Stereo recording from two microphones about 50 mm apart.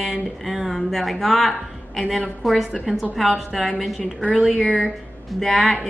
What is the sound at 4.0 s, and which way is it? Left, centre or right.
Speech, left.